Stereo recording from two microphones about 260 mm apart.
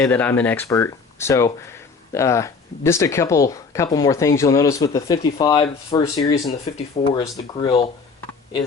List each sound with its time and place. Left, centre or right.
0.0 s speech: centre